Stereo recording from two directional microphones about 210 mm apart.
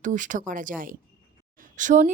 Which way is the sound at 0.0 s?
35° right (ahead or behind).